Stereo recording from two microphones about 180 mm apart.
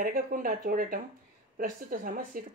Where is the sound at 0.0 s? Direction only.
50° right (ahead or behind).